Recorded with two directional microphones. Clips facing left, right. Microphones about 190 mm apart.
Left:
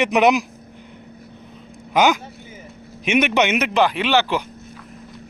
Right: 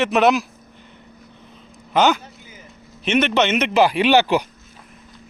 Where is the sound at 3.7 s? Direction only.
10° right (ahead or behind).